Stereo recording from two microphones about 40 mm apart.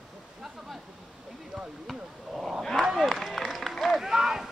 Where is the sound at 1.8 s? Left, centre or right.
Centre.